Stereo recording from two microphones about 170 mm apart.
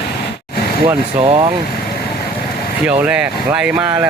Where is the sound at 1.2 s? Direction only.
35° right (ahead or behind).